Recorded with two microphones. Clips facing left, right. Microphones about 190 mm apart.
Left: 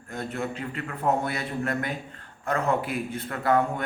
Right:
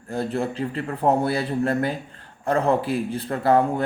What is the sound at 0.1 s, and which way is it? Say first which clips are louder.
A man's voice: right 6 dB; 30° right (ahead or behind).